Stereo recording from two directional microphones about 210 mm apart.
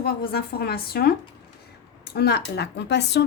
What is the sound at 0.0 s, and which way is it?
A woman's voice, 45° left (ahead or behind).